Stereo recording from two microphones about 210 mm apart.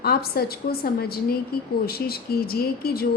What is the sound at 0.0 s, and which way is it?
A woman's voice, 50° left (ahead or behind).